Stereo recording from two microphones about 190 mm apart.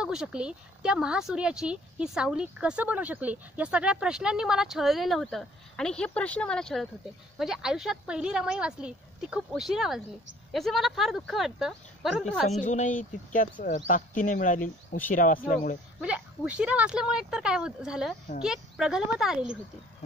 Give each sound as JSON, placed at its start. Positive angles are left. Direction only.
{"t": 0.0, "sound": "speech", "side_deg": -5}
{"t": 12.4, "sound": "speech", "side_deg": 35}
{"t": 16.0, "sound": "speech", "side_deg": -5}